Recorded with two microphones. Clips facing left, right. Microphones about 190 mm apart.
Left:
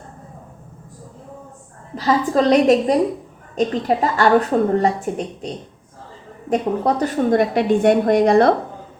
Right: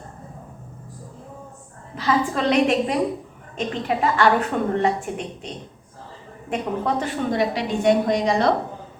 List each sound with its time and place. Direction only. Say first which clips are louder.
2.0 s a woman's voice: left 5 dB; 40° left (ahead or behind)
6.5 s a woman's voice: left 5 dB; 40° left (ahead or behind); by 8.5 s 55° left (ahead or behind)